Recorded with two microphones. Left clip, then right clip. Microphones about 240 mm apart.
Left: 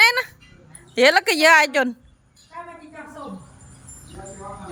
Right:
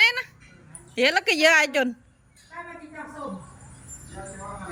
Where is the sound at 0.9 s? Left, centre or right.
Centre.